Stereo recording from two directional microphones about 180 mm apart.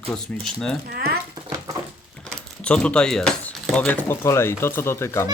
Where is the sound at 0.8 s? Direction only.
60° right (ahead or behind).